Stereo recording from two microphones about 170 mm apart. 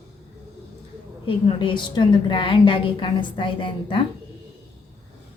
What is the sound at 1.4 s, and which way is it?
A woman's voice, 30° left (ahead or behind).